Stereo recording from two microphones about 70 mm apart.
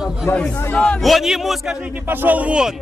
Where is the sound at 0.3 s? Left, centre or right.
Left.